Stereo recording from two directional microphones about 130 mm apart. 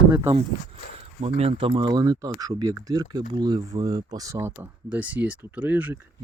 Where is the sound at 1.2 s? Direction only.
50° right (ahead or behind); by 4.5 s 25° right (ahead or behind).